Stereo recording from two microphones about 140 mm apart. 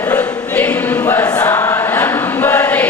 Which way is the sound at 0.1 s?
10° left (ahead or behind).